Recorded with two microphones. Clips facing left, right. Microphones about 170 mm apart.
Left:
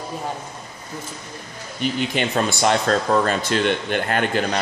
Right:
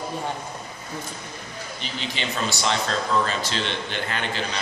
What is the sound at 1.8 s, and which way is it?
Speech, 50° left (ahead or behind).